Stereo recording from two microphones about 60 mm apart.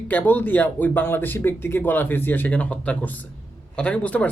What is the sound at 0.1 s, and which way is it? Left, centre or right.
Speech, left.